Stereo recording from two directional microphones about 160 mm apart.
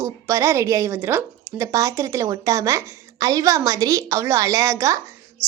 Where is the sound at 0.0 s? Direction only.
20° right (ahead or behind).